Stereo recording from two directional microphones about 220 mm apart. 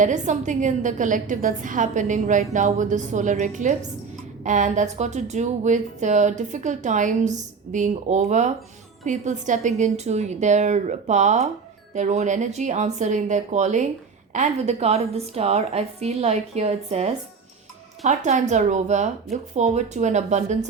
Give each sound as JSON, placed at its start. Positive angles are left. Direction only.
{"t": 0.0, "sound": "a woman's voice", "side_deg": -35}